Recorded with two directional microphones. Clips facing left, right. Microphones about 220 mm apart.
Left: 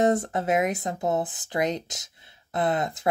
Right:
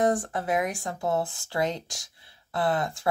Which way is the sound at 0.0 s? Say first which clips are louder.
Left 3 dB; 25° left (ahead or behind).